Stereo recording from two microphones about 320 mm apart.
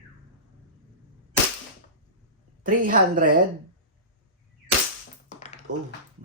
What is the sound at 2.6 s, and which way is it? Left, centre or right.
Speech, right.